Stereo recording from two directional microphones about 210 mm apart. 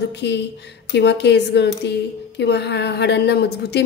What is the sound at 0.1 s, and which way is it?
A woman's voice, 55° left (ahead or behind).